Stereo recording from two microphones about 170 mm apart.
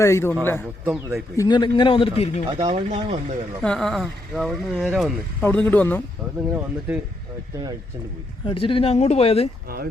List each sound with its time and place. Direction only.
0.0 s speech: 15° left (ahead or behind)
0.9 s speech: 15° right (ahead or behind)
1.4 s a man's voice: 25° left (ahead or behind)
2.5 s speech: 25° right (ahead or behind)
2.9 s speech: 40° right (ahead or behind)
3.6 s speech: 5° left (ahead or behind)
6.5 s speech: 10° right (ahead or behind)
8.4 s speech: 30° left (ahead or behind)
9.6 s speech: 60° right (ahead or behind)